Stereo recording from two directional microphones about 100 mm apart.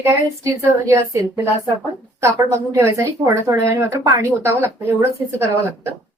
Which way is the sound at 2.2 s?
30° right (ahead or behind).